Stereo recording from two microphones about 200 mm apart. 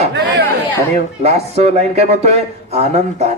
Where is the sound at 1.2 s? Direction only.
30° right (ahead or behind).